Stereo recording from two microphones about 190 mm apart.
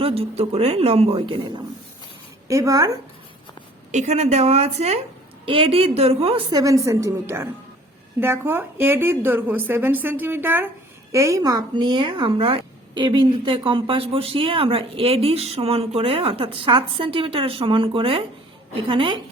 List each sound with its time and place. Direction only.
0.0 s a woman's voice: 30° right (ahead or behind)
3.9 s a woman's voice: 35° right (ahead or behind)